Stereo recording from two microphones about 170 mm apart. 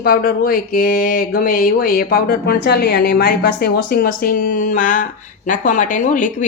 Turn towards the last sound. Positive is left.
turn(degrees=50)  # may be behind; listen again after turning